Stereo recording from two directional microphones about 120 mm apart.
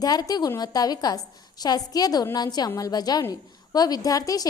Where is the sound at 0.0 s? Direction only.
35° left (ahead or behind).